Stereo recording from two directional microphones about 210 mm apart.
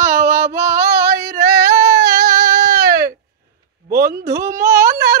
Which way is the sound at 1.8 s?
50° right (ahead or behind).